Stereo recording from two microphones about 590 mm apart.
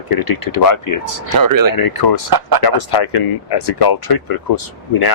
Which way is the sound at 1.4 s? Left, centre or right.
Right.